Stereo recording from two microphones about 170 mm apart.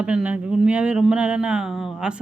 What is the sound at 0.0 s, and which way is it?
Speech, 5° right (ahead or behind).